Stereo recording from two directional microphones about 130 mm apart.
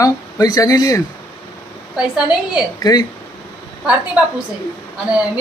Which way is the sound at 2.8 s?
30° left (ahead or behind).